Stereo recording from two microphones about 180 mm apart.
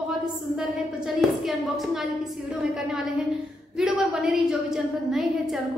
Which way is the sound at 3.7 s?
Centre (ahead or behind).